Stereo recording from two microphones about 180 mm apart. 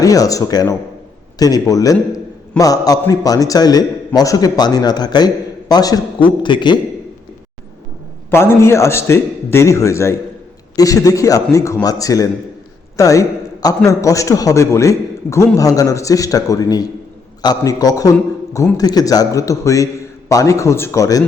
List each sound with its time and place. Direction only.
0.0 s a man's voice: 20° left (ahead or behind)
8.3 s a man's voice: 15° left (ahead or behind)